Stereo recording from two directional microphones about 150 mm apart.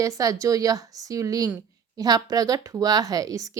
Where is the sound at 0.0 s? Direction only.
25° right (ahead or behind).